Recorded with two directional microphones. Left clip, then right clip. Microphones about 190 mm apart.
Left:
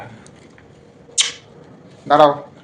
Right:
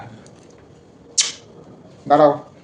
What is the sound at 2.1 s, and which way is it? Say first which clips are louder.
Speech: left 1 dB; 30° right (ahead or behind).